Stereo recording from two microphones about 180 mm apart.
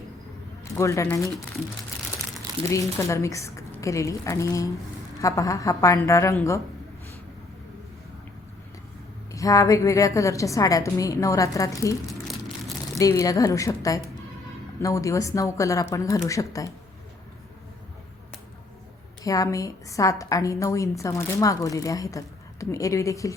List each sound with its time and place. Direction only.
0.6 s speech: 15° left (ahead or behind)
3.0 s a woman's voice: 15° left (ahead or behind)
9.3 s a woman's voice: 20° left (ahead or behind)
13.0 s a woman's voice: 20° left (ahead or behind)
19.2 s a woman's voice: 20° left (ahead or behind)